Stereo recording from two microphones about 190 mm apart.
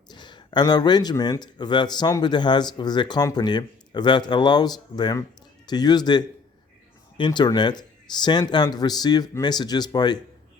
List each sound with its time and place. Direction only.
0.1 s speech: 25° left (ahead or behind)